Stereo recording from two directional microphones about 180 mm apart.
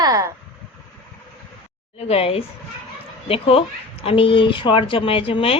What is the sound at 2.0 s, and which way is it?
Speech, 35° left (ahead or behind).